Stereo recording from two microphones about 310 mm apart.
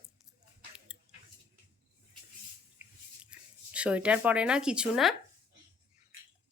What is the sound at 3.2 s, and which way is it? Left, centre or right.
Speech, centre.